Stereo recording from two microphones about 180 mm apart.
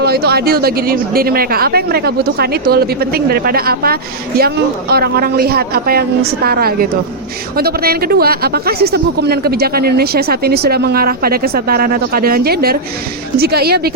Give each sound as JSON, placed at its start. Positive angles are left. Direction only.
{"t": 0.0, "sound": "a woman's voice", "side_deg": -60}